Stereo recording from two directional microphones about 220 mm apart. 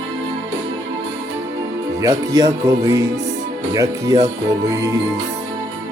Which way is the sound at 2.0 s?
15° right (ahead or behind).